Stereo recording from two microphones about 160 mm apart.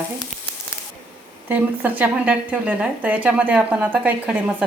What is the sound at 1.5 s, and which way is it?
Speech, 10° right (ahead or behind).